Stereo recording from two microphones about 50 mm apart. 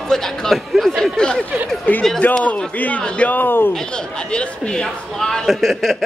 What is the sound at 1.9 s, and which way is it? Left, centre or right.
A man's voice, left.